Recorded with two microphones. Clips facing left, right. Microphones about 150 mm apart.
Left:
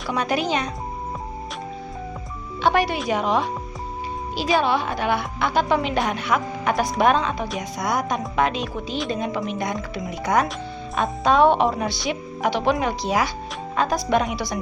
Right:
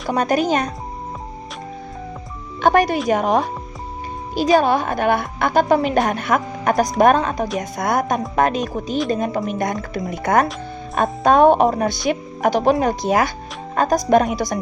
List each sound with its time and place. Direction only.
0.1 s a woman's voice: 45° right (ahead or behind)
2.6 s a woman's voice: 45° right (ahead or behind)